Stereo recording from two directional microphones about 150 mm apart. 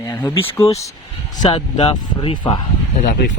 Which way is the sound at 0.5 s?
20° left (ahead or behind).